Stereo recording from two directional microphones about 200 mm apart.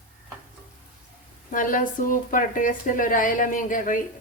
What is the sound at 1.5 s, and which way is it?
Speech, 40° left (ahead or behind).